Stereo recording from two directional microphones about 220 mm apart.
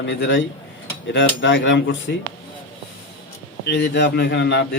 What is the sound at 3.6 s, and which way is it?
A man's voice, 50° left (ahead or behind).